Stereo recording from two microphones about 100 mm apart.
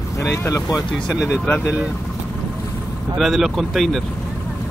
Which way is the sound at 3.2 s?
Centre (ahead or behind).